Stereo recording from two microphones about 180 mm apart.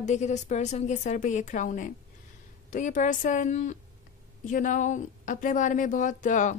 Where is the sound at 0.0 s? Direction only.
40° left (ahead or behind).